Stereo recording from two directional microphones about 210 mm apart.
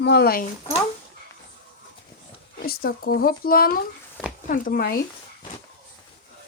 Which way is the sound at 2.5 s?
45° left (ahead or behind).